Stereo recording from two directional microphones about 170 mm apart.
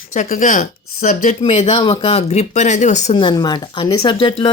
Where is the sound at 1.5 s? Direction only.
30° left (ahead or behind).